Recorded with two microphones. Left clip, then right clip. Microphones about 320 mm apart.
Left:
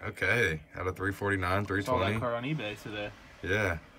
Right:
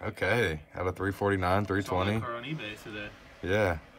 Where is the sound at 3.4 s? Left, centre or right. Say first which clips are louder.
Right 2 dB; centre.